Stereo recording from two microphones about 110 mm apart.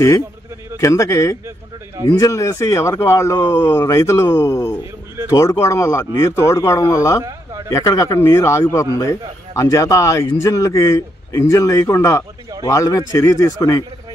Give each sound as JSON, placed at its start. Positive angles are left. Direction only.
{"t": 0.7, "sound": "a man's voice", "side_deg": 25}